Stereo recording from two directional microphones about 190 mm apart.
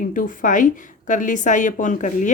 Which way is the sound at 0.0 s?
45° left (ahead or behind).